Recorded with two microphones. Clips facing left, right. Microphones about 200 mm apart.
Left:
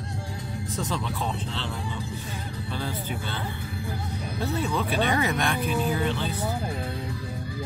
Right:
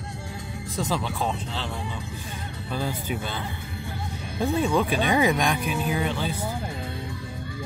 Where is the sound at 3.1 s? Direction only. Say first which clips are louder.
Right 3 dB; 15° right (ahead or behind).